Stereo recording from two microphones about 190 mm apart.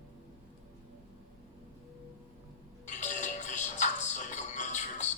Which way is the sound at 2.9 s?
40° left (ahead or behind).